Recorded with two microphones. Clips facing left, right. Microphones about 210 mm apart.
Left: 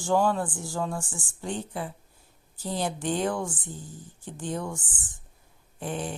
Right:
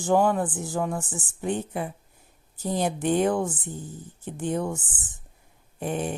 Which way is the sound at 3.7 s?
60° right (ahead or behind).